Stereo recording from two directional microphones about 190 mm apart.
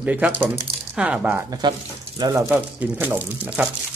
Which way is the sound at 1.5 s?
20° right (ahead or behind).